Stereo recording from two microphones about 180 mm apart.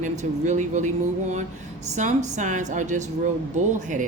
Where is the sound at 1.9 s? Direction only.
40° right (ahead or behind).